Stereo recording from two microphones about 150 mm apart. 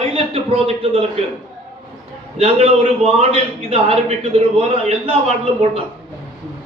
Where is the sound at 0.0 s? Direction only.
40° right (ahead or behind).